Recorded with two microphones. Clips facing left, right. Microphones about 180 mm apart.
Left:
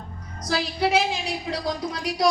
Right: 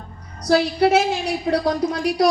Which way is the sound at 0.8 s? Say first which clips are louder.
Right 3 dB; 40° right (ahead or behind).